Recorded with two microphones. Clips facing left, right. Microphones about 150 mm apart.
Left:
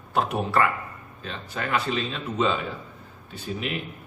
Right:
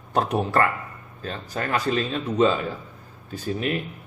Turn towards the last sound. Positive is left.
turn(degrees=-40)  # may be behind; listen again after turning